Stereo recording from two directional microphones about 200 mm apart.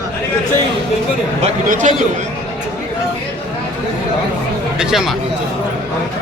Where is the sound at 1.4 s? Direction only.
40° right (ahead or behind).